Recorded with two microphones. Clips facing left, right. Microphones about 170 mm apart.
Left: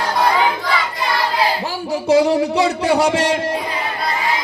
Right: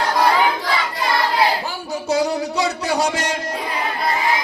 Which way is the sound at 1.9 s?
25° left (ahead or behind).